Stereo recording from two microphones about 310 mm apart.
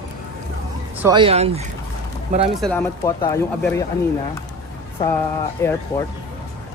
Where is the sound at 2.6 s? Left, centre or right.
Centre.